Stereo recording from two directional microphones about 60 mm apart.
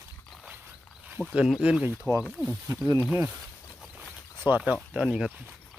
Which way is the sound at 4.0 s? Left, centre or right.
Right.